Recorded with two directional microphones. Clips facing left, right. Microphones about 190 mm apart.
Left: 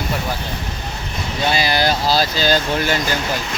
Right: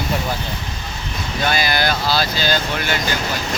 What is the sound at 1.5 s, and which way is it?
Speech, 30° left (ahead or behind).